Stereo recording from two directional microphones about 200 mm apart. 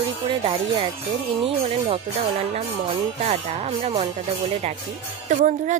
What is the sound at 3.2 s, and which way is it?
A woman's voice, 30° right (ahead or behind).